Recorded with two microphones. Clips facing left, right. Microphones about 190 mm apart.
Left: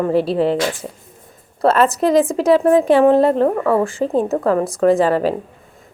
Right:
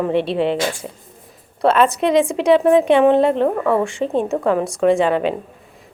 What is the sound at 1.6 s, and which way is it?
A woman's voice, 5° left (ahead or behind).